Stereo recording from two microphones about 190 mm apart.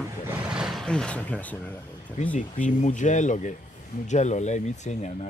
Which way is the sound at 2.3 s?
40° left (ahead or behind).